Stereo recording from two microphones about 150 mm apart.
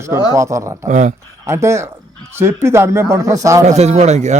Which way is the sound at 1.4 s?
20° right (ahead or behind).